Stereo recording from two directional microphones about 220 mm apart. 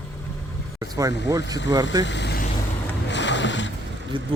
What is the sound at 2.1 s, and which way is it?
Vehicle, 50° left (ahead or behind).